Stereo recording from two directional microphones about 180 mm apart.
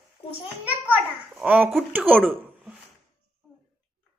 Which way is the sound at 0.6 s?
10° right (ahead or behind).